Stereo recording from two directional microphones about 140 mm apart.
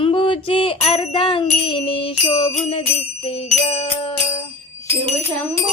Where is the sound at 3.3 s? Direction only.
45° left (ahead or behind).